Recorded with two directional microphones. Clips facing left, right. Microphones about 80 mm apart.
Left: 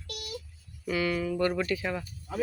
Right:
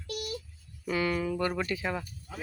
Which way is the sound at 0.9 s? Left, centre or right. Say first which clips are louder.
Even; right.